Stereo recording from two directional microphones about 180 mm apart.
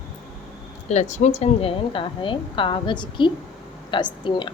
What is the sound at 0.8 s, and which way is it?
A woman's voice, 40° left (ahead or behind).